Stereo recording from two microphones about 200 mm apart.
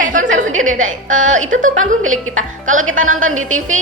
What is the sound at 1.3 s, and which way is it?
Speech, 40° right (ahead or behind).